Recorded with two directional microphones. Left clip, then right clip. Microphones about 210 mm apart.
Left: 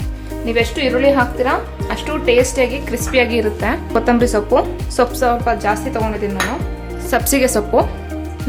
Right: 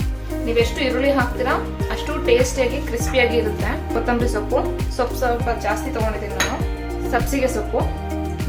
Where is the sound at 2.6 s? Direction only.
45° left (ahead or behind).